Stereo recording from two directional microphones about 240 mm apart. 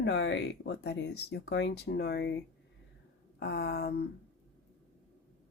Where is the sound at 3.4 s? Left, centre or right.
Left.